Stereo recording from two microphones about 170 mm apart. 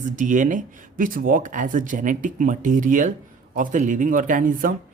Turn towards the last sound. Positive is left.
turn(degrees=-50)  # may be behind; listen again after turning